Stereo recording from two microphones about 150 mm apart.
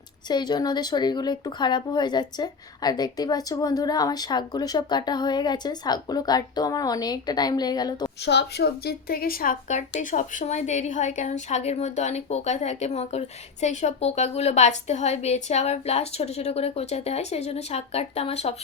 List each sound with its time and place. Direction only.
0.3 s speech: 30° left (ahead or behind)
8.2 s a woman's voice: 90° left; by 18.5 s 45° left (ahead or behind)